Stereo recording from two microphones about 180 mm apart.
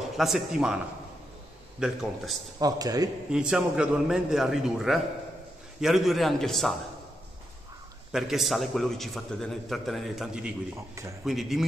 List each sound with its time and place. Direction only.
0.2 s a man's voice: centre (ahead or behind)
1.8 s a man's voice: centre (ahead or behind)
2.6 s a man's voice: 20° right (ahead or behind)
3.3 s a man's voice: 5° right (ahead or behind)
8.1 s a man's voice: centre (ahead or behind)